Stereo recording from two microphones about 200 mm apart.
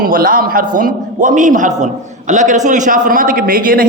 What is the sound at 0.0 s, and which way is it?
A man's voice, 45° right (ahead or behind).